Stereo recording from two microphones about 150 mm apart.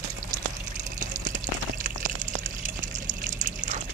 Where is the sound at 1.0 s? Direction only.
60° right (ahead or behind).